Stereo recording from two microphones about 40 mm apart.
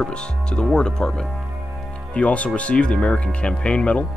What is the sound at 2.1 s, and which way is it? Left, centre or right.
Speech, left.